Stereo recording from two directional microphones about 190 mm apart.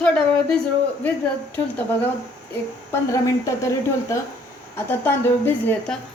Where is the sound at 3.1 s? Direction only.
15° left (ahead or behind).